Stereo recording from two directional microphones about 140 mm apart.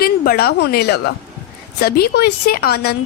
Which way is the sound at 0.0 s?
90° left.